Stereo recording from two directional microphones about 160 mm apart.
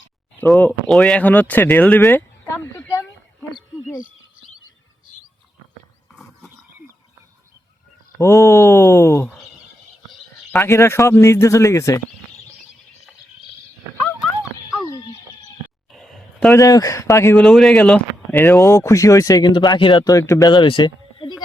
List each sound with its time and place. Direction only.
0.4 s speech: centre (ahead or behind)
8.2 s speech: 20° left (ahead or behind)
10.5 s speech: 15° left (ahead or behind)
15.9 s a sound: centre (ahead or behind)
16.6 s speech: 20° left (ahead or behind)
17.3 s speech: centre (ahead or behind); by 21.3 s 30° left (ahead or behind)